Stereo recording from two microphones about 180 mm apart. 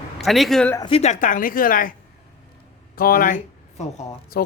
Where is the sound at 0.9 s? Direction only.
35° left (ahead or behind).